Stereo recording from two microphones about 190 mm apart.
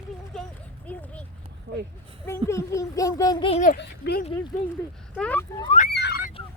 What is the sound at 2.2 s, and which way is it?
A child's voice, 15° left (ahead or behind).